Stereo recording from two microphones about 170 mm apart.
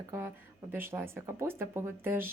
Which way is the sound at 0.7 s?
15° right (ahead or behind).